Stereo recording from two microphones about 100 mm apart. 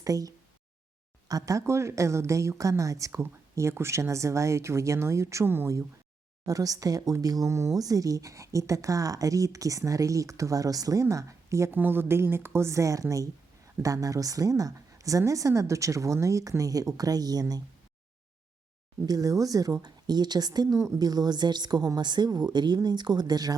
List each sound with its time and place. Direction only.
0.0 s speech: 35° right (ahead or behind)
6.4 s speech: 35° right (ahead or behind)
19.0 s speech: 35° right (ahead or behind)
21.1 s a woman's voice: 45° right (ahead or behind)